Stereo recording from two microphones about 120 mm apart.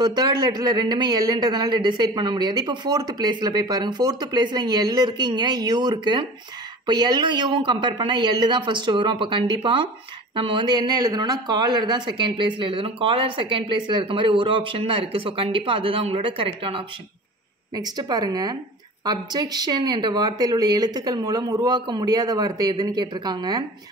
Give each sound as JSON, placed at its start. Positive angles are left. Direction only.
{"t": 0.0, "sound": "a man's voice", "side_deg": -35}
{"t": 17.7, "sound": "a man's voice", "side_deg": -35}